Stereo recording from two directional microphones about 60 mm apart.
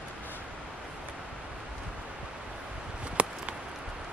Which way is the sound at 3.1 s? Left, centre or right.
Centre.